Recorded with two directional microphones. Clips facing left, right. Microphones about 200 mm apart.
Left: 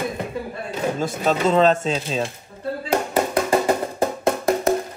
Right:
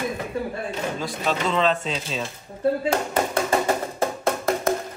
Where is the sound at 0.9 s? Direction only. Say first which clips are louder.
Left 6 dB; 45° left (ahead or behind).